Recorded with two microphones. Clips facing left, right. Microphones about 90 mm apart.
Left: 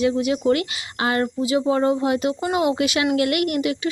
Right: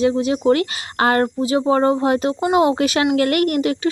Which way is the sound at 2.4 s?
30° right (ahead or behind).